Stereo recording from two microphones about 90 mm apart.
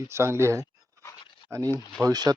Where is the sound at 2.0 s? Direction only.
45° right (ahead or behind).